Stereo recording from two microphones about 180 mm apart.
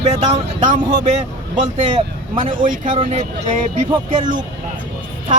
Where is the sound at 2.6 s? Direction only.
45° right (ahead or behind).